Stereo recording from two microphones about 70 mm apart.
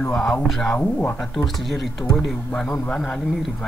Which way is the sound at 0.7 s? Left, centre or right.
Centre.